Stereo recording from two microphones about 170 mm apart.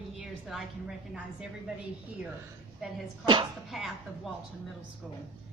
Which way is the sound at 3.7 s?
Centre (ahead or behind).